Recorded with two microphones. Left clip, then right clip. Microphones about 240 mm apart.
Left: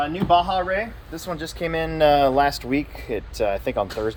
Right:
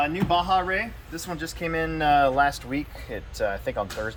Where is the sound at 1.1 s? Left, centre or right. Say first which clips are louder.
Left 4 dB; left.